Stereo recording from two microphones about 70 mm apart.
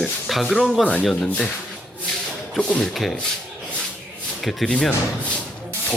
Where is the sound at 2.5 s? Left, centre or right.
Centre.